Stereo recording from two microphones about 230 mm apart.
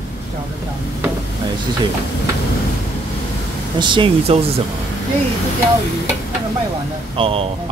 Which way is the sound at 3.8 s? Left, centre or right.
Right.